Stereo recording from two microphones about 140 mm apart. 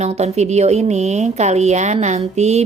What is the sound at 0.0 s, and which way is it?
Speech, 50° right (ahead or behind).